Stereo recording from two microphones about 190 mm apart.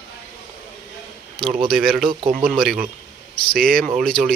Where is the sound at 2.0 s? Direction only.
25° right (ahead or behind).